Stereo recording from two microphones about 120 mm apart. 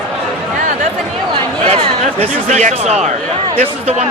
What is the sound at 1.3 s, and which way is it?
Speech, 50° right (ahead or behind).